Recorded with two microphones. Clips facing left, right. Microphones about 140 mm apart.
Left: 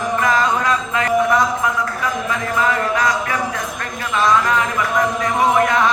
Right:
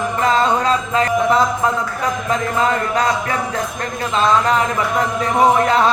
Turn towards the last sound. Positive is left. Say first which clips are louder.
# right 1 dB
turn(degrees=-30)  # may be behind; listen again after turning